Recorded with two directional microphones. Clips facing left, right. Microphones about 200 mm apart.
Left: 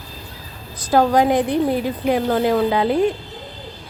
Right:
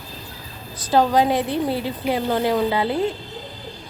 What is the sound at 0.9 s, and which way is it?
A woman's voice, 15° left (ahead or behind).